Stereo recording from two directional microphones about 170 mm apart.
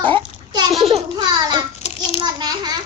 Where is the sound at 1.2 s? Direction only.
25° right (ahead or behind).